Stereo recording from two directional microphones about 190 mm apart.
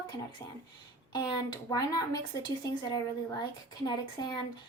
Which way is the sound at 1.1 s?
20° left (ahead or behind).